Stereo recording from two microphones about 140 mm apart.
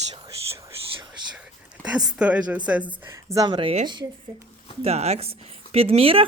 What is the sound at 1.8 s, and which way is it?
A woman's voice, 5° right (ahead or behind).